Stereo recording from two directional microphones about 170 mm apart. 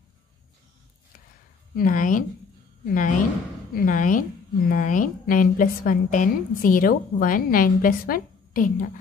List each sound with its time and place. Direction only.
1.8 s a woman's voice: 50° left (ahead or behind)